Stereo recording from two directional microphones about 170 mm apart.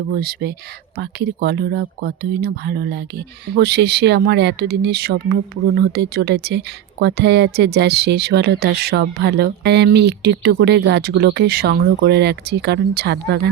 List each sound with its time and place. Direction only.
0.2 s speech: 65° right (ahead or behind); by 13.5 s 80° right